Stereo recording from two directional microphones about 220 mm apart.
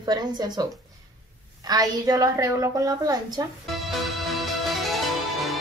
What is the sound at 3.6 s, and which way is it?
Music, centre (ahead or behind).